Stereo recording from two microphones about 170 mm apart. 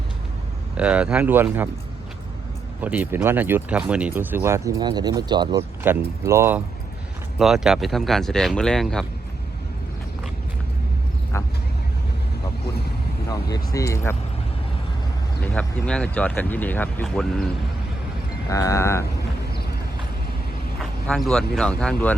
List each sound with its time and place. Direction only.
0.8 s speech: 5° right (ahead or behind)
2.8 s speech: 10° right (ahead or behind); by 5.6 s 25° right (ahead or behind)
5.8 s speech: 15° right (ahead or behind)
7.3 s speech: centre (ahead or behind)
11.3 s speech: 15° left (ahead or behind)
13.2 s speech: 20° left (ahead or behind)
15.5 s speech: 5° left (ahead or behind)
18.4 s speech: 20° left (ahead or behind)
21.1 s speech: 5° left (ahead or behind)